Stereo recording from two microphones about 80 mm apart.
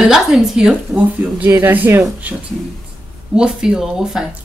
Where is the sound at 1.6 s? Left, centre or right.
Right.